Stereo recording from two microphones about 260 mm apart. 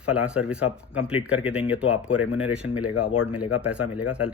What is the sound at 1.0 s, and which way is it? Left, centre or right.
Speech, left.